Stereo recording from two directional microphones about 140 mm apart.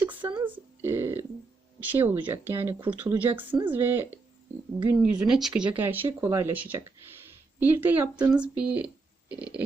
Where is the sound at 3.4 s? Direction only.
35° right (ahead or behind).